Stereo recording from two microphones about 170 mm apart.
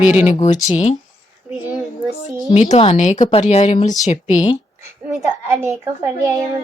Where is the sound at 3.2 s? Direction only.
30° left (ahead or behind).